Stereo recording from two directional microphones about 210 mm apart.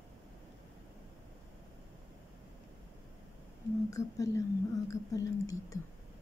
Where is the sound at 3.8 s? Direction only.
15° left (ahead or behind).